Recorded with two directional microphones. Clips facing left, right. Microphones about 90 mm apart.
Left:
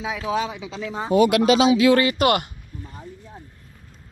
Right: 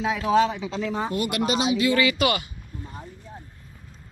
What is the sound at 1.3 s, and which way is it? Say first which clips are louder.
Speech: left 7 dB; 90° left.